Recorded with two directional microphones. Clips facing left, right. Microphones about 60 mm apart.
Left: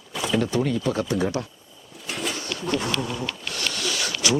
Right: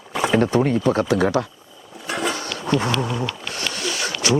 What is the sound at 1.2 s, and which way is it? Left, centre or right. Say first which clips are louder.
Speech: right 6 dB; right.